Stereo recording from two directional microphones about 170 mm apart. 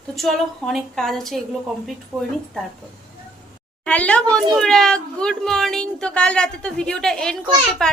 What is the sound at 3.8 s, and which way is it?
A woman's voice, 5° left (ahead or behind).